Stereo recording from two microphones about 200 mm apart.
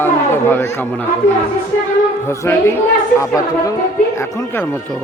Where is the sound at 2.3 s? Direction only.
15° left (ahead or behind).